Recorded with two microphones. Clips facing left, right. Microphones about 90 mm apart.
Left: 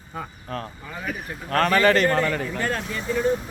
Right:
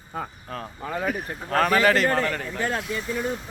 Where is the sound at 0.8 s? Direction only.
50° right (ahead or behind).